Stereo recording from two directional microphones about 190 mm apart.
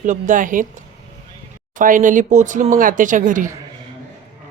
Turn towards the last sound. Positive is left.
turn(degrees=-45)  # may be behind; listen again after turning